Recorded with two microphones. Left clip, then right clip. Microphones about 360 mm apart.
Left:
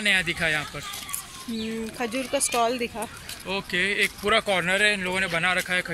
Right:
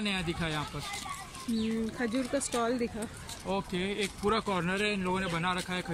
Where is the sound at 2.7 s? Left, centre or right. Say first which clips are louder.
Left 5 dB; left.